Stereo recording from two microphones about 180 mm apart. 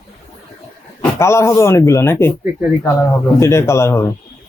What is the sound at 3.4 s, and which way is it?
Speech, 15° left (ahead or behind).